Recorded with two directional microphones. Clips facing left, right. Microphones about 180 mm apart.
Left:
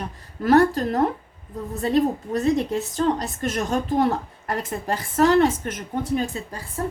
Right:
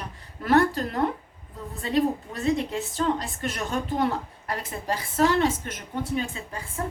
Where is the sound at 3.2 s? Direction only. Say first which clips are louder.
Left 5 dB; 40° left (ahead or behind).